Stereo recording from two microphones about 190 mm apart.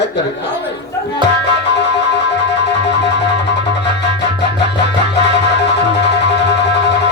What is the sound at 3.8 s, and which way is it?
Music, 65° left (ahead or behind).